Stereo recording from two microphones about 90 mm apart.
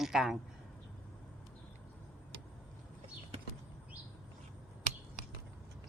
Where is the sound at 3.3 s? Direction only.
90° right.